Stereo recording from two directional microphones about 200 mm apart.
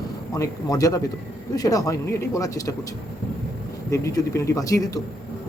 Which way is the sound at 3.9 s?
15° left (ahead or behind).